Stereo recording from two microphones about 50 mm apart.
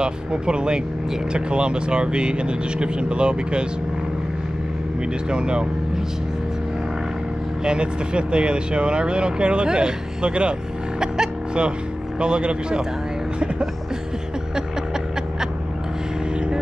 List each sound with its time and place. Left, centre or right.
0.0 s speech: centre
5.3 s speech: centre
7.6 s speech: centre
11.0 s music: centre
12.2 s speech: centre